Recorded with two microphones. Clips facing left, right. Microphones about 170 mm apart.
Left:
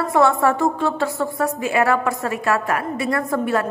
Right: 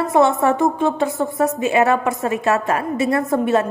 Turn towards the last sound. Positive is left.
turn(degrees=-25)  # may be behind; listen again after turning